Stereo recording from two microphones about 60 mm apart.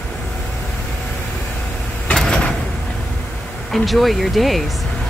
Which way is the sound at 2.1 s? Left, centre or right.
Centre.